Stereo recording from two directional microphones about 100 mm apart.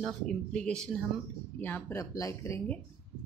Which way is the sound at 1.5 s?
20° left (ahead or behind).